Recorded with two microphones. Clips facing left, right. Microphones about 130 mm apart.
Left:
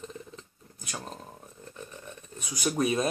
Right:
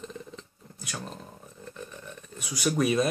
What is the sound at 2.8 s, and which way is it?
Speech, 30° left (ahead or behind).